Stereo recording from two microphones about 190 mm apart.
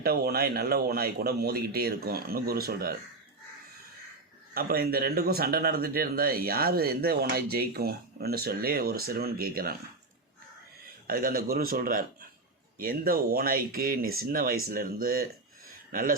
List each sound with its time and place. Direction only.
0.0 s speech: 55° right (ahead or behind)
4.5 s speech: 55° right (ahead or behind)
11.0 s speech: 50° right (ahead or behind)